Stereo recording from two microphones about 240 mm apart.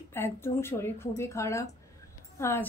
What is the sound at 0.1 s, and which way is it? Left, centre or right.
Speech, centre.